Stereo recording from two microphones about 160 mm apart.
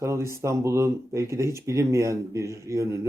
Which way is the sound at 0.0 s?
15° right (ahead or behind).